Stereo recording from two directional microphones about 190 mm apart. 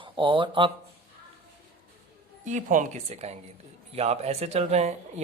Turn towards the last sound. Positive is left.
turn(degrees=-35)  # may be behind; listen again after turning